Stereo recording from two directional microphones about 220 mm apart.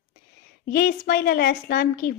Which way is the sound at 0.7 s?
40° left (ahead or behind).